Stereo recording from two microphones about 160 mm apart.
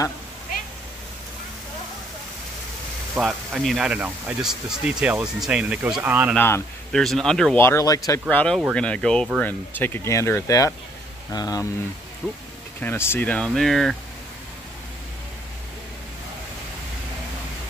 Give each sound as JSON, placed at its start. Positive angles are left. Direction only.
{"t": 3.2, "sound": "speech", "side_deg": 0}
{"t": 6.3, "sound": "speech", "side_deg": 15}
{"t": 6.9, "sound": "speech", "side_deg": 0}
{"t": 7.5, "sound": "speech", "side_deg": 15}
{"t": 12.8, "sound": "speech", "side_deg": 15}